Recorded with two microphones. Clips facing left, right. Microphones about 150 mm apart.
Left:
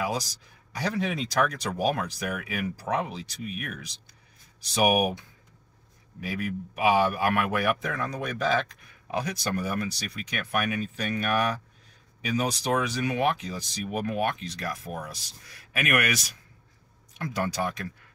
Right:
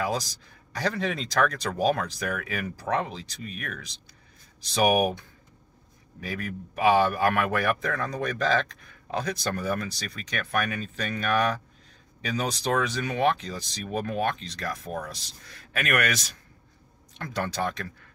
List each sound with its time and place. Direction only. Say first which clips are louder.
0.7 s a man's voice: even; 5° left (ahead or behind)
6.2 s a man's voice: left 2 dB; 10° left (ahead or behind)